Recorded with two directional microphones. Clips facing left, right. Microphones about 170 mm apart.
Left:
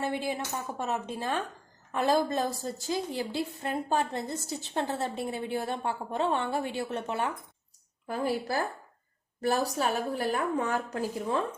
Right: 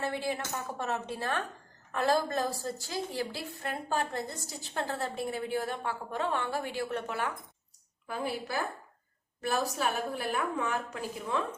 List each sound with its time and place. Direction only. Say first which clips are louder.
0.0 s a woman's voice: left 2 dB; 15° left (ahead or behind)
8.0 s a woman's voice: left 5 dB; 40° left (ahead or behind)